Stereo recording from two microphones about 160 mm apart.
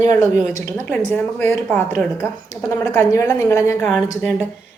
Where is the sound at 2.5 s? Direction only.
20° left (ahead or behind).